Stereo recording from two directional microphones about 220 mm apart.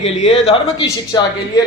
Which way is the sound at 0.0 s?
30° left (ahead or behind).